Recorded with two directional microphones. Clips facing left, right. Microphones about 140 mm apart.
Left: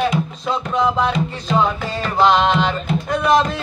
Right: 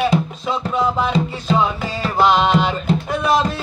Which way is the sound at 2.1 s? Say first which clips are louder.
Even; 5° right (ahead or behind).